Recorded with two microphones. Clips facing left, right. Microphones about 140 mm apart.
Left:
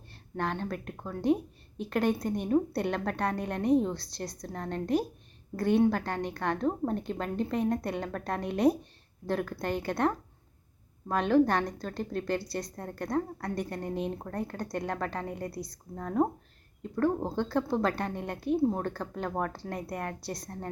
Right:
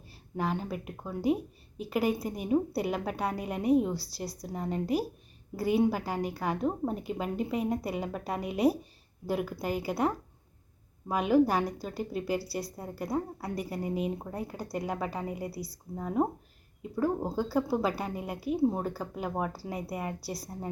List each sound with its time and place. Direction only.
0.1 s a woman's voice: 5° right (ahead or behind)